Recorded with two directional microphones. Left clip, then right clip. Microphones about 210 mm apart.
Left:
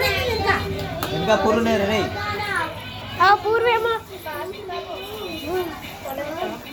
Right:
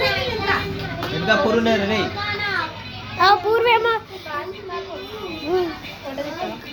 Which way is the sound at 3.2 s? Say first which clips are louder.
Right 1 dB; 10° right (ahead or behind).